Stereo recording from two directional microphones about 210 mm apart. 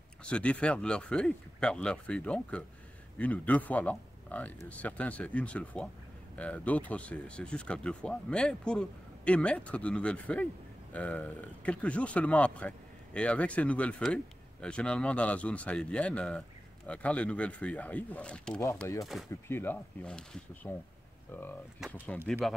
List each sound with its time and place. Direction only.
0.2 s speech: 5° left (ahead or behind)
21.7 s speech: 5° right (ahead or behind)